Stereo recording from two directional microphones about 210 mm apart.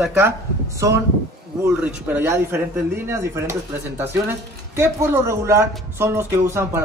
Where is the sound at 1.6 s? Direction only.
10° right (ahead or behind).